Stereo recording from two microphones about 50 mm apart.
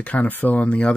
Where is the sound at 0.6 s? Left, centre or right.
Left.